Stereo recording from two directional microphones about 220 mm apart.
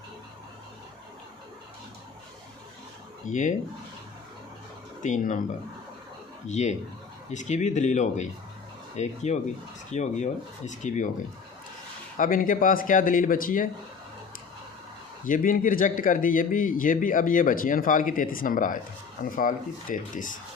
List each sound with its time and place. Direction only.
3.2 s speech: 35° left (ahead or behind)
5.0 s speech: 35° left (ahead or behind)
6.5 s speech: 30° left (ahead or behind)
12.1 s speech: 40° left (ahead or behind)
15.3 s speech: 35° left (ahead or behind)